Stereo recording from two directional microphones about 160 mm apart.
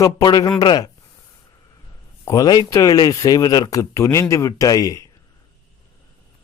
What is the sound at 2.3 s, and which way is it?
Speech, 25° left (ahead or behind).